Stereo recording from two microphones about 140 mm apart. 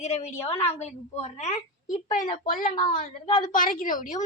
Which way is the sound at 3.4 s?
75° left (ahead or behind).